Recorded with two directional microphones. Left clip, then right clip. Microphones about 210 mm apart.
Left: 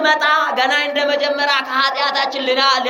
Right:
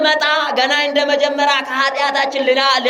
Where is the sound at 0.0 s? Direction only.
45° right (ahead or behind).